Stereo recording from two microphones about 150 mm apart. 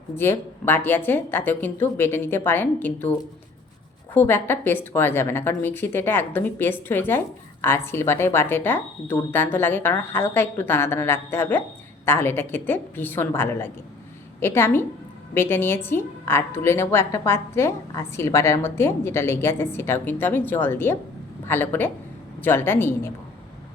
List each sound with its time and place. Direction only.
0.2 s a woman's voice: 15° left (ahead or behind)
4.1 s a woman's voice: 15° left (ahead or behind)